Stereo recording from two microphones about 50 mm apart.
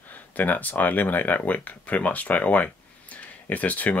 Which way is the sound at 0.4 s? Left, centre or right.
Left.